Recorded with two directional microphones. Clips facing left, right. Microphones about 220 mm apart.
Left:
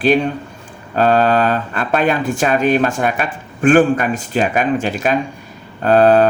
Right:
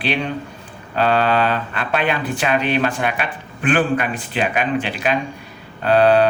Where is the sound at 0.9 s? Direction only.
45° left (ahead or behind).